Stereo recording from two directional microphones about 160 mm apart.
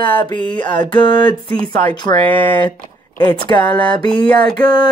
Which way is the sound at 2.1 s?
20° left (ahead or behind).